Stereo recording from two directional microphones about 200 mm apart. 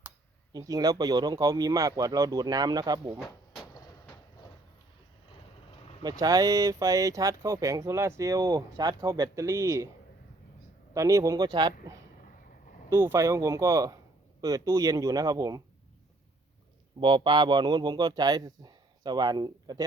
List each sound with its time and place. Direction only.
0.5 s speech: 20° right (ahead or behind)
6.0 s speech: 20° right (ahead or behind)
10.9 s speech: 15° right (ahead or behind)
17.0 s speech: 25° right (ahead or behind)